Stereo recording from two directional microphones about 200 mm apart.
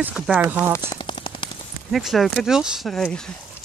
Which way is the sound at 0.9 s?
25° left (ahead or behind).